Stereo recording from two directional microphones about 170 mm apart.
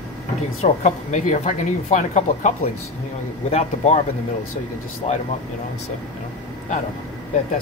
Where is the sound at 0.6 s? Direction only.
45° left (ahead or behind).